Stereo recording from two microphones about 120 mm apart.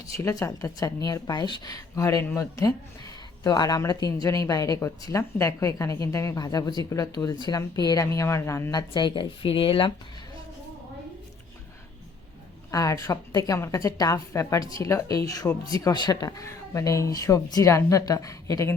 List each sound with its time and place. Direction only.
0.2 s speech: 25° left (ahead or behind)
8.0 s speech: 25° left (ahead or behind)
8.9 s speech: 40° left (ahead or behind)
12.7 s speech: 30° left (ahead or behind)